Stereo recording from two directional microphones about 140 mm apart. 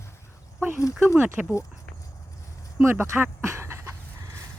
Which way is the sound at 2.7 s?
15° right (ahead or behind).